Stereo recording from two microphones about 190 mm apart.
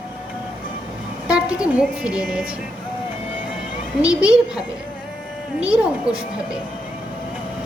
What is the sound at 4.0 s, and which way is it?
Speech, 5° right (ahead or behind).